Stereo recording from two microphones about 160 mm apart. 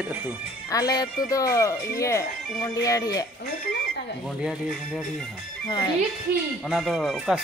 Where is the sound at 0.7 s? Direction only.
25° left (ahead or behind).